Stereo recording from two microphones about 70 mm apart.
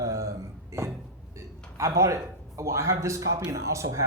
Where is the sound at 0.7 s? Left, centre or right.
Right.